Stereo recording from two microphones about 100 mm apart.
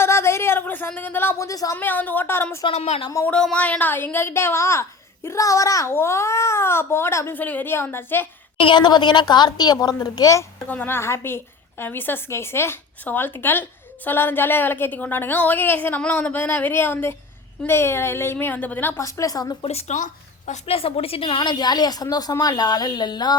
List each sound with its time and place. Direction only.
0.0 s a sound: 25° left (ahead or behind)
1.7 s a woman's voice: 20° left (ahead or behind)
2.6 s a woman's voice: 75° left (ahead or behind)
3.2 s a woman's voice: 10° left (ahead or behind)
8.5 s a woman's voice: 55° left (ahead or behind); by 10.4 s 35° left (ahead or behind)
10.7 s a woman's voice: 20° left (ahead or behind)
18.9 s a woman's voice: 35° left (ahead or behind)
20.7 s a woman's voice: 70° left (ahead or behind)
21.5 s a woman's voice: 45° left (ahead or behind)